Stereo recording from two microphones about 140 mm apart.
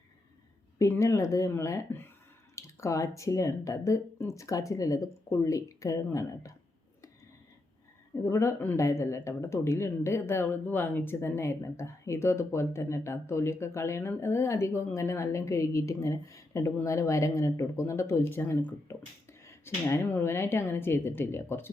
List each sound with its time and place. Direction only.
0.8 s speech: 20° left (ahead or behind)
8.2 s speech: 20° left (ahead or behind)